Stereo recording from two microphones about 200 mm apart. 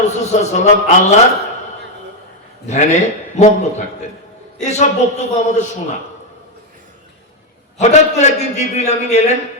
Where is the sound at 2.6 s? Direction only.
35° left (ahead or behind).